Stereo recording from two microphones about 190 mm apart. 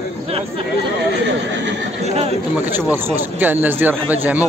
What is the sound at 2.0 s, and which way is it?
Chatter, 30° right (ahead or behind).